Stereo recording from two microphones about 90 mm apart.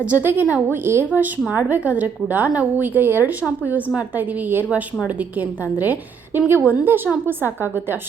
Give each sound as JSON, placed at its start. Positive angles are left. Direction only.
{"t": 0.0, "sound": "a woman's voice", "side_deg": -20}